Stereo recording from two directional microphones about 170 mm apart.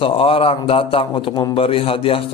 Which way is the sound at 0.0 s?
35° left (ahead or behind).